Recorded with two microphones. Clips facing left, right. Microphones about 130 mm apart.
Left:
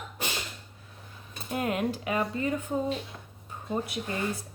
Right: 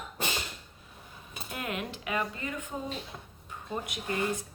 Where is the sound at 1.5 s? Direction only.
35° left (ahead or behind).